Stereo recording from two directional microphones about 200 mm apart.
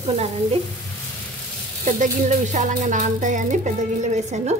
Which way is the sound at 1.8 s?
35° right (ahead or behind).